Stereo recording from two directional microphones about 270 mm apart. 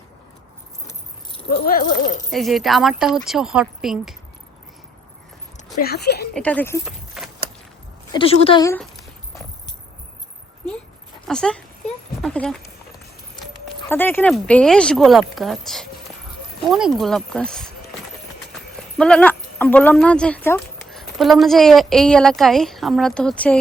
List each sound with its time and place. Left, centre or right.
1.5 s speech: left
2.3 s speech: centre
5.8 s speech: left
6.3 s a woman's voice: centre
6.8 s walk: centre
8.1 s a woman's voice: centre
11.3 s speech: centre
13.8 s speech: centre
18.9 s speech: centre